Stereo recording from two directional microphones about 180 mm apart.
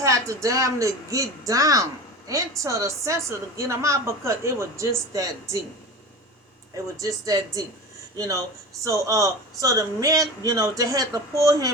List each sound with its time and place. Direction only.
0.0 s a woman's voice: 15° right (ahead or behind)
6.8 s a woman's voice: 20° right (ahead or behind)